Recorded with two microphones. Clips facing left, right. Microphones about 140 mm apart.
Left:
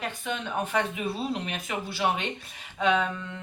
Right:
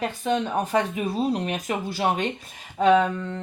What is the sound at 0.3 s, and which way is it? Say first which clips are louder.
Speech: right 7 dB; 40° right (ahead or behind).